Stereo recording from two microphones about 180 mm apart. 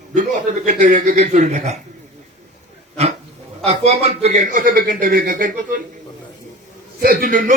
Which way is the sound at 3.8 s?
35° right (ahead or behind).